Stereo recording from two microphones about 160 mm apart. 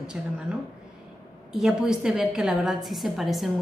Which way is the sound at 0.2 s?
5° right (ahead or behind).